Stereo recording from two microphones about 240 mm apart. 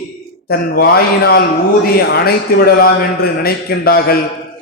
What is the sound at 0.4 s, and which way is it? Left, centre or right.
A man's voice, left.